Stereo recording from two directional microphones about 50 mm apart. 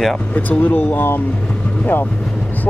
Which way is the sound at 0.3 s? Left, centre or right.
Left.